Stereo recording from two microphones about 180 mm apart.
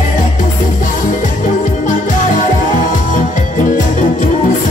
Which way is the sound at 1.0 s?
45° left (ahead or behind).